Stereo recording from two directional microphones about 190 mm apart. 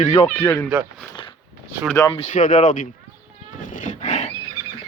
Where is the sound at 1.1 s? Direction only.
25° left (ahead or behind).